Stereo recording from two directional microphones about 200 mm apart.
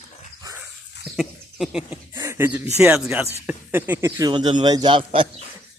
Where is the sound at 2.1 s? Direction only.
15° right (ahead or behind).